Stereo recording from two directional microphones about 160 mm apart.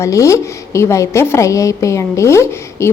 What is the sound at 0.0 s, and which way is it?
A woman's voice, 20° left (ahead or behind).